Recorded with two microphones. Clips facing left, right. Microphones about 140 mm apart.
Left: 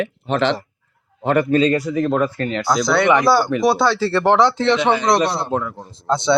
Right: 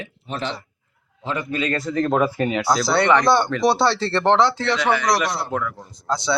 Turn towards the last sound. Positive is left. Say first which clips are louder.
# left 5 dB
turn(degrees=25)  # may be behind; listen again after turning